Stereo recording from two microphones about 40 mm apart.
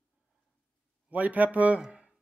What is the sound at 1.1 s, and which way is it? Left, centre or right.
Speech, right.